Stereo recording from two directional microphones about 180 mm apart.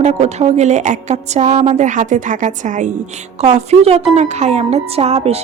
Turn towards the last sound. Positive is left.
turn(degrees=-35)  # may be behind; listen again after turning